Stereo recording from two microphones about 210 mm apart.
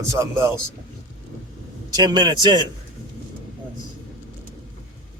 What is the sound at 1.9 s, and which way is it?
Speech, 20° right (ahead or behind).